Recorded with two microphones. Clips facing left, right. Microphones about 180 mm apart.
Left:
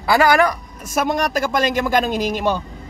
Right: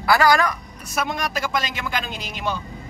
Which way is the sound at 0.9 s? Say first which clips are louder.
Left 6 dB; 45° left (ahead or behind).